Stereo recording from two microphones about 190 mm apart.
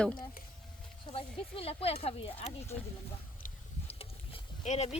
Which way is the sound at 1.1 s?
30° left (ahead or behind).